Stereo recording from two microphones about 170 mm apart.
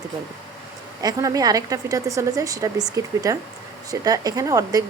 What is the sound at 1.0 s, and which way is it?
A woman's voice, 20° right (ahead or behind).